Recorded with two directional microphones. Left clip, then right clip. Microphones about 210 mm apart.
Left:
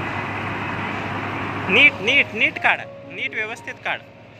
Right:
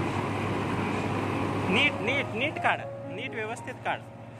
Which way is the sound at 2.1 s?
15° left (ahead or behind).